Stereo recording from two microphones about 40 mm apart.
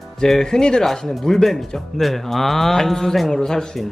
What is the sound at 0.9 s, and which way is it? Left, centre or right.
Speech, centre.